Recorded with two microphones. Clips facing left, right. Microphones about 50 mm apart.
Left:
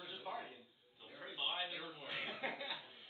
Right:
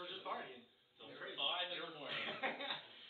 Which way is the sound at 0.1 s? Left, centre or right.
Centre.